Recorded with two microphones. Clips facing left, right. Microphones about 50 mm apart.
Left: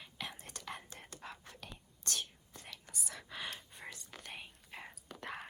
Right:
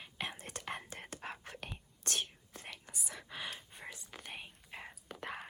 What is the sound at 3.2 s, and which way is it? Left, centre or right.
Gasp, centre.